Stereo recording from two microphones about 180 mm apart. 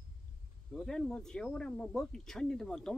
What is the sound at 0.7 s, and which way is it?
Speech, 5° left (ahead or behind).